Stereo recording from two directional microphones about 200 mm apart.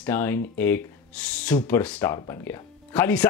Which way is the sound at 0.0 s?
10° left (ahead or behind).